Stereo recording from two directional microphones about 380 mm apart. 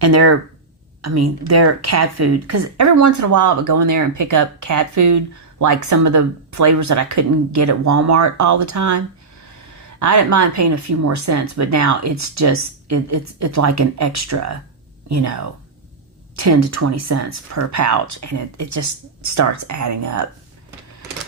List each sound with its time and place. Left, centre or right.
0.0 s a woman's voice: right